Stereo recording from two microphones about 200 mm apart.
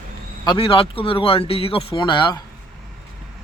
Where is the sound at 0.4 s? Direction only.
25° left (ahead or behind).